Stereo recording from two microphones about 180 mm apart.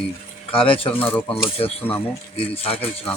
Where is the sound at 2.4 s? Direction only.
35° left (ahead or behind).